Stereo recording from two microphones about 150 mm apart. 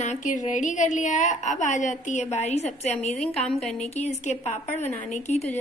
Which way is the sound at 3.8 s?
50° left (ahead or behind).